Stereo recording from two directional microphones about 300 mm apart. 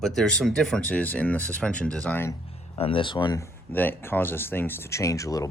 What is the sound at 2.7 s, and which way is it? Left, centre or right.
Speech, centre.